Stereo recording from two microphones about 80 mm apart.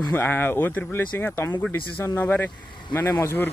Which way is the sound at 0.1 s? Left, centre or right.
Left.